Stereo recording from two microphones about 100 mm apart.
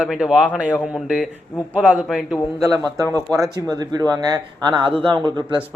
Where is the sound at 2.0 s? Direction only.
Centre (ahead or behind).